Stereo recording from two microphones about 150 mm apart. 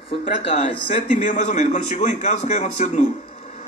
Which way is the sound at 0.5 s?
50° left (ahead or behind).